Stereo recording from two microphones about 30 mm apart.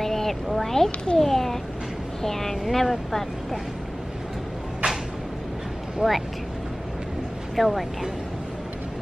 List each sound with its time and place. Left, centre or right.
0.0 s a sound: centre
1.1 s speech: centre
6.0 s speech: right
7.5 s a woman's voice: centre